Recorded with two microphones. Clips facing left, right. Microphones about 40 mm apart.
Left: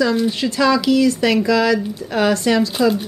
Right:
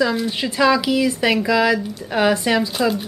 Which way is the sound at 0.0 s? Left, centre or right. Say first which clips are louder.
Left 2 dB; centre.